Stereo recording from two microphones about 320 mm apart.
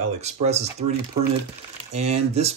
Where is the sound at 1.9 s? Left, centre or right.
Centre.